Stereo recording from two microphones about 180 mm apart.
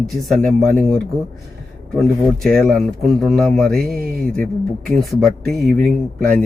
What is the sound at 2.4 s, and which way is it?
Speech, centre (ahead or behind).